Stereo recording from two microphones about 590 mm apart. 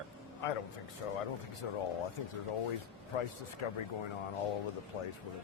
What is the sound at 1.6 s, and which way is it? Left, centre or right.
Speech, left.